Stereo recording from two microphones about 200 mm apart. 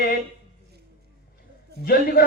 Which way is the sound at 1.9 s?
50° left (ahead or behind).